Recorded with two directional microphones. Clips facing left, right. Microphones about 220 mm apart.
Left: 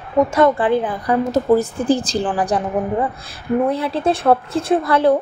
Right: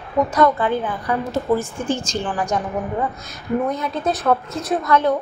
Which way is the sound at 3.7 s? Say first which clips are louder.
Left 4 dB; 30° left (ahead or behind).